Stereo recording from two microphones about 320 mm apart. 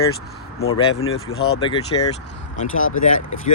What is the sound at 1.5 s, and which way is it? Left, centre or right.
Speech, centre.